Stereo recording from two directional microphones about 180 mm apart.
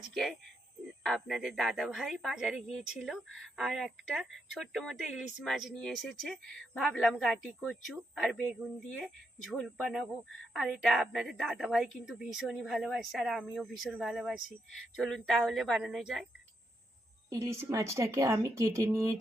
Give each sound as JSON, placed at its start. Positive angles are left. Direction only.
{"t": 0.1, "sound": "speech", "side_deg": 0}
{"t": 17.2, "sound": "speech", "side_deg": -15}